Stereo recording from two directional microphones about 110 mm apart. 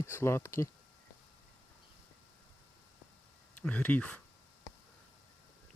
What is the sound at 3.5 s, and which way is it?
Speech, 10° left (ahead or behind).